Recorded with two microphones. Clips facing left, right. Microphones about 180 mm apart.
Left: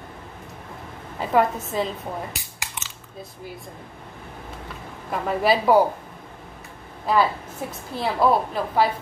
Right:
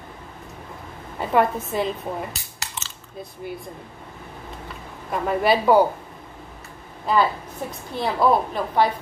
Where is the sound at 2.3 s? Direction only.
15° left (ahead or behind).